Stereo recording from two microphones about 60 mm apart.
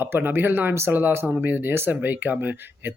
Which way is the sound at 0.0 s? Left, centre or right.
Right.